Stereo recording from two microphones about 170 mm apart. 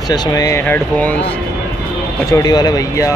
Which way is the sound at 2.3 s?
25° left (ahead or behind).